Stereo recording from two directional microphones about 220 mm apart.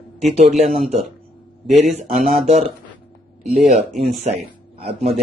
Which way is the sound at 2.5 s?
30° right (ahead or behind).